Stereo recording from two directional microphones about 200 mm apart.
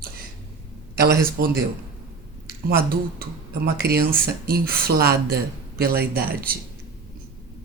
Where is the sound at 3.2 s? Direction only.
50° right (ahead or behind).